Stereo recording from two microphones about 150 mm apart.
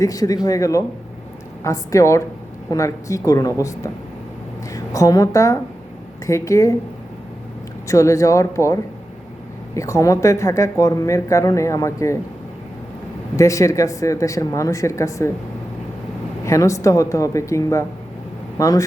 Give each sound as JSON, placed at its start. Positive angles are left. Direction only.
{"t": 0.0, "sound": "speech", "side_deg": 25}
{"t": 7.9, "sound": "speech", "side_deg": 20}
{"t": 13.3, "sound": "speech", "side_deg": 20}
{"t": 16.5, "sound": "speech", "side_deg": 20}